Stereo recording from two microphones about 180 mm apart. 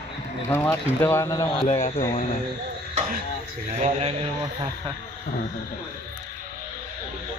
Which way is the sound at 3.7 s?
35° right (ahead or behind).